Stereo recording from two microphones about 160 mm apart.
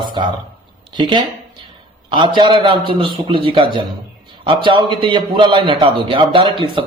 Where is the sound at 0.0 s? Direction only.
30° right (ahead or behind).